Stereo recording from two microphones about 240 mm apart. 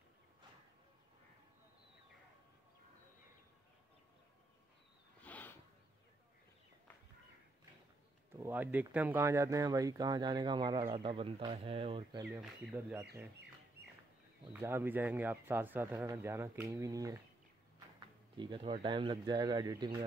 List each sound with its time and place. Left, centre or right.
5.2 s a sound: centre
8.4 s speech: centre
12.2 s speech: centre
14.5 s speech: centre
18.4 s speech: right